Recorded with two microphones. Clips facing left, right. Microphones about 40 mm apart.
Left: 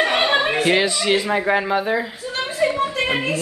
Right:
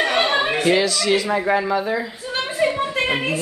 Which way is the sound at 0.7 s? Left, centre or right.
Left.